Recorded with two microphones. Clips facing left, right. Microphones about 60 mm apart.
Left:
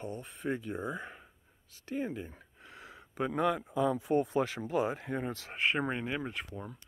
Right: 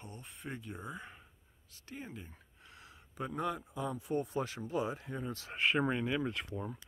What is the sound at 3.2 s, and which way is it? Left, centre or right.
Speech, left.